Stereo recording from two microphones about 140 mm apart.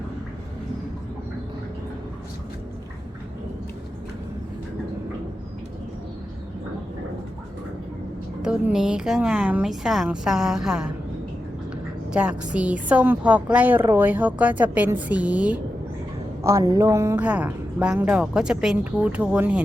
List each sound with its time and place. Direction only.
8.4 s a woman's voice: 5° right (ahead or behind)
12.1 s a woman's voice: 5° right (ahead or behind)
16.4 s a woman's voice: 20° right (ahead or behind)
18.2 s a woman's voice: 5° right (ahead or behind)